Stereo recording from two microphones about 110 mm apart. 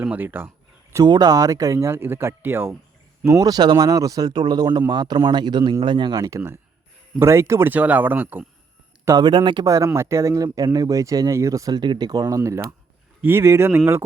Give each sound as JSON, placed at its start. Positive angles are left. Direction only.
{"t": 0.0, "sound": "speech", "side_deg": -15}
{"t": 1.0, "sound": "speech", "side_deg": -40}
{"t": 3.2, "sound": "speech", "side_deg": -35}
{"t": 7.2, "sound": "speech", "side_deg": -25}
{"t": 9.0, "sound": "speech", "side_deg": -40}
{"t": 9.6, "sound": "speech", "side_deg": -30}
{"t": 12.2, "sound": "speech", "side_deg": -25}